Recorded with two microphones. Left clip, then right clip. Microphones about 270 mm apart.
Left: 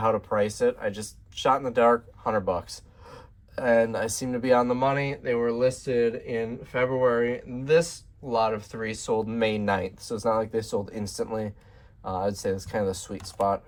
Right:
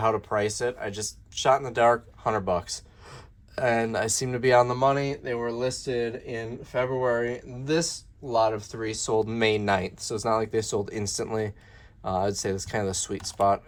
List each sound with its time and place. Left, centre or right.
0.0 s speech: right